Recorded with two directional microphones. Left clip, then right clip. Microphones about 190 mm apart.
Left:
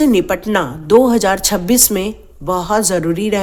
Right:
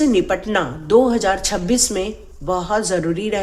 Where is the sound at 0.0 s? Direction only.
40° left (ahead or behind).